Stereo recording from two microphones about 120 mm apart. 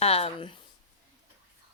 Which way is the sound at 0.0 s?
55° left (ahead or behind).